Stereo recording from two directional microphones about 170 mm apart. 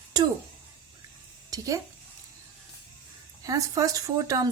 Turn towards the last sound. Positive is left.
turn(degrees=-20)  # may be behind; listen again after turning